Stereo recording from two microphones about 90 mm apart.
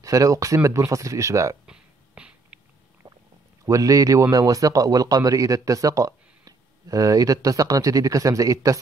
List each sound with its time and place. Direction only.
0.0 s speech: 40° right (ahead or behind)
1.7 s a sound: 10° right (ahead or behind)
3.6 s speech: 40° right (ahead or behind)